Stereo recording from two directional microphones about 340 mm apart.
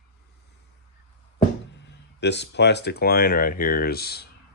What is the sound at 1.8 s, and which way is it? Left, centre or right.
Speech, left.